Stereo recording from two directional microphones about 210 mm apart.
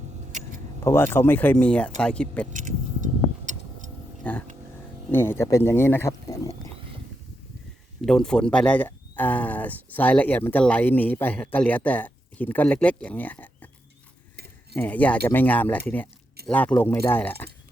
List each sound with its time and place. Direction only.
0.3 s a sound: 35° right (ahead or behind)
0.9 s speech: 10° left (ahead or behind)
2.5 s vehicle: 40° right (ahead or behind)
4.2 s speech: 10° left (ahead or behind)
8.0 s speech: centre (ahead or behind)
14.3 s cutlery: 50° right (ahead or behind)
14.8 s speech: 5° left (ahead or behind)